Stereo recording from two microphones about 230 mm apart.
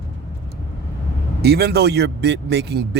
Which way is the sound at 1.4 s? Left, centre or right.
Right.